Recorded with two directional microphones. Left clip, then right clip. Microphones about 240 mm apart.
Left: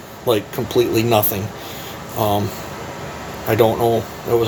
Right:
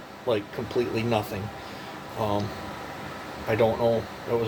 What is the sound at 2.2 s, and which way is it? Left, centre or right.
Speech, left.